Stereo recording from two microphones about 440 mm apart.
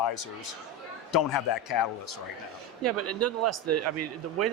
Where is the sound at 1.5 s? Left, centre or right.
Left.